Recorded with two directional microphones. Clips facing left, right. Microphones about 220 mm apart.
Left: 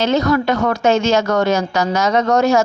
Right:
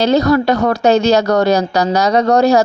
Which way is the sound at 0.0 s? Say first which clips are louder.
Right 4 dB; 35° right (ahead or behind).